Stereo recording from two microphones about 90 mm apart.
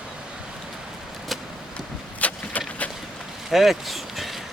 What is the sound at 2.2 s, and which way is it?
Vehicle, 15° left (ahead or behind).